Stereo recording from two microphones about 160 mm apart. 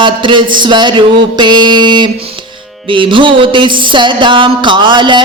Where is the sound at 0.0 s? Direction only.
30° right (ahead or behind).